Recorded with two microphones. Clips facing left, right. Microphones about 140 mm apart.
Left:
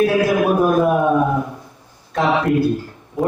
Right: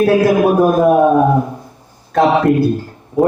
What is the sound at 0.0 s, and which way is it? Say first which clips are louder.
A man's voice: right 4 dB; 40° right (ahead or behind).